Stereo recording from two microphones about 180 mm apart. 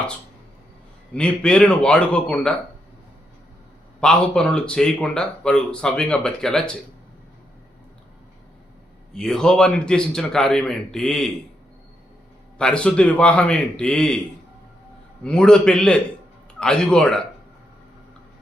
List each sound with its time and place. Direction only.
1.1 s speech: 5° left (ahead or behind)
4.0 s speech: 5° left (ahead or behind)
9.1 s speech: 5° left (ahead or behind)
12.5 s speech: 5° left (ahead or behind)
15.2 s speech: 5° left (ahead or behind)